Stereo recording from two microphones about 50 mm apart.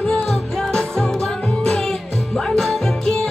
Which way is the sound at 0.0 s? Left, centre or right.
Left.